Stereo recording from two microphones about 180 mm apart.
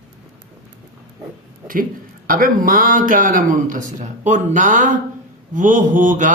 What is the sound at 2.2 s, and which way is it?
Speech, 50° right (ahead or behind).